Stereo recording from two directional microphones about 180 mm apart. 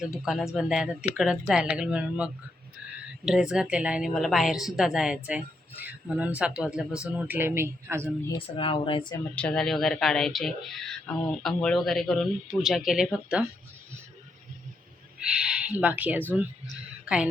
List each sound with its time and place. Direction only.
0.0 s a woman's voice: 5° right (ahead or behind)
8.4 s speech: 30° left (ahead or behind)
9.1 s a woman's voice: 5° left (ahead or behind)
15.2 s speech: 5° right (ahead or behind)